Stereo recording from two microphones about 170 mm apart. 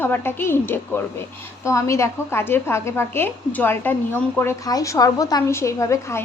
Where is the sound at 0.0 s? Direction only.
10° left (ahead or behind).